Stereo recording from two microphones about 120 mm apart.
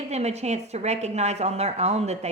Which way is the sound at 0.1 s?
65° right (ahead or behind).